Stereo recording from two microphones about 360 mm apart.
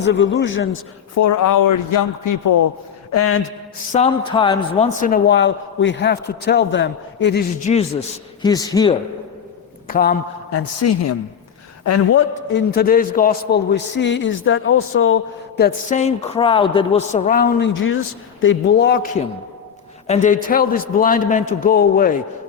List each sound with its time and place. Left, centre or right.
0.0 s a man's voice: left
1.1 s a man's voice: left
3.1 s a man's voice: left
3.9 s a man's voice: centre
7.7 s a man's voice: centre
9.8 s a man's voice: left
10.5 s a man's voice: left
20.1 s a man's voice: left